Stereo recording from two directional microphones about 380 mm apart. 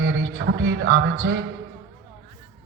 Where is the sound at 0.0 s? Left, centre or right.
Right.